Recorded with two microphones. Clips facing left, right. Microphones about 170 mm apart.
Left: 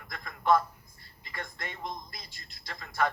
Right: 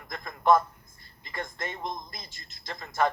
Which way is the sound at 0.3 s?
45° right (ahead or behind).